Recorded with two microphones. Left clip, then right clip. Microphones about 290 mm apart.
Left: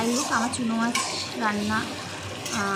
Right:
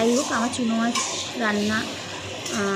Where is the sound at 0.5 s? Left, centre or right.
Centre.